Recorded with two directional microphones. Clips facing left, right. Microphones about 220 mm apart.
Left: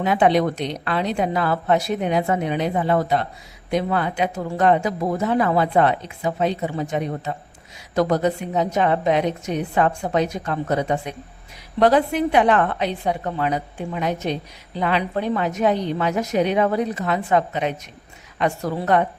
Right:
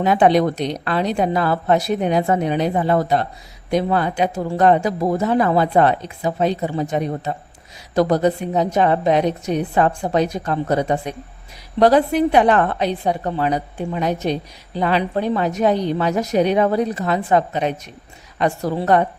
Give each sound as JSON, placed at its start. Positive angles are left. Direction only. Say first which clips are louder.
{"t": 0.0, "sound": "speech", "louder": "right 3 dB", "side_deg": -40}